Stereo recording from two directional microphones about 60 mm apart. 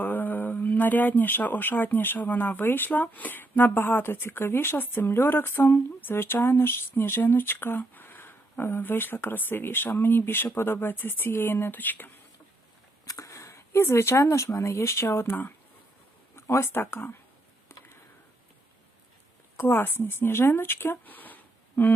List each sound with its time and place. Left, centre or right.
0.0 s speech: left
13.1 s speech: left
16.3 s speech: left
19.5 s speech: left